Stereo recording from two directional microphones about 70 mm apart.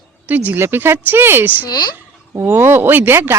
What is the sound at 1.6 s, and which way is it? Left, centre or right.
Speech, left.